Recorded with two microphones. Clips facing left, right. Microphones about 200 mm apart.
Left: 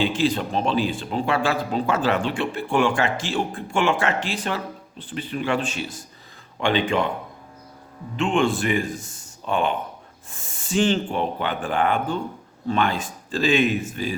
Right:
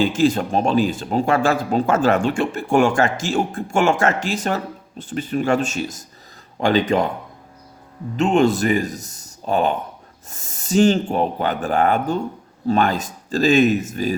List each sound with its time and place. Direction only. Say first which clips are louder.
0.0 s speech: right 4 dB; 45° right (ahead or behind)
8.1 s a man's voice: right 5 dB; 40° right (ahead or behind)